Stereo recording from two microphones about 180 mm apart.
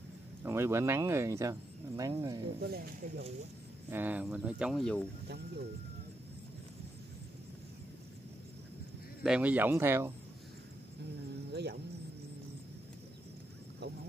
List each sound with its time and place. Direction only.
0.4 s speech: 15° right (ahead or behind)
2.6 s speech: 55° right (ahead or behind)
3.9 s speech: 10° right (ahead or behind)
9.2 s speech: 5° right (ahead or behind)
11.5 s speech: 70° right (ahead or behind)